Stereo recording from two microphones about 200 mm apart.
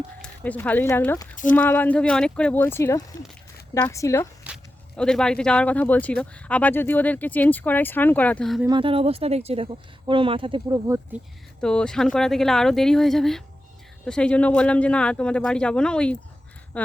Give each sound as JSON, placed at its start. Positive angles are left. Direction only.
{"t": 0.2, "sound": "speech", "side_deg": 5}
{"t": 4.4, "sound": "speech", "side_deg": 0}
{"t": 8.6, "sound": "speech", "side_deg": -25}
{"t": 11.6, "sound": "speech", "side_deg": 5}